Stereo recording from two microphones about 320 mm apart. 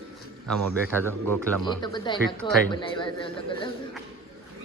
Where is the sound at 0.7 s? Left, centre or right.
Centre.